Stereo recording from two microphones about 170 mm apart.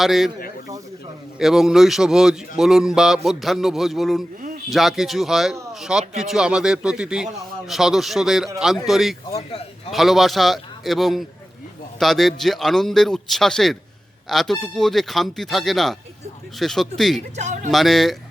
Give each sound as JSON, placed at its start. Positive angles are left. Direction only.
{"t": 0.0, "sound": "a man's voice", "side_deg": 0}
{"t": 1.4, "sound": "a man's voice", "side_deg": 0}
{"t": 4.4, "sound": "a sound", "side_deg": -50}
{"t": 4.7, "sound": "a man's voice", "side_deg": 0}
{"t": 9.3, "sound": "a man's voice", "side_deg": 35}
{"t": 9.9, "sound": "a man's voice", "side_deg": 0}
{"t": 17.3, "sound": "speech", "side_deg": -45}
{"t": 17.7, "sound": "a man's voice", "side_deg": 0}